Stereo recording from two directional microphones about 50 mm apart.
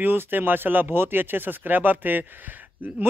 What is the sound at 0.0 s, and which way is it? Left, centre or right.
A man's voice, right.